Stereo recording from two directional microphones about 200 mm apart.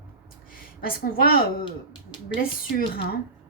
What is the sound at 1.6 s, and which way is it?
Speech, 25° left (ahead or behind).